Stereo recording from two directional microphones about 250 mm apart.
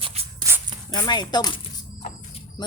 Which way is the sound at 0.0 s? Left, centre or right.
Right.